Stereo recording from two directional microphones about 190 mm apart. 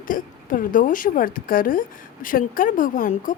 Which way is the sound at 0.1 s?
45° left (ahead or behind).